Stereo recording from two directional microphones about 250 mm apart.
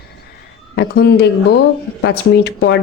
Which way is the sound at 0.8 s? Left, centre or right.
Left.